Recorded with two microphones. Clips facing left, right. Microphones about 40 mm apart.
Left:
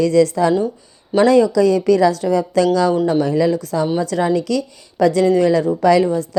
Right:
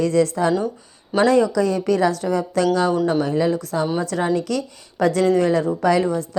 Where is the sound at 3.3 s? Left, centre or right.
Left.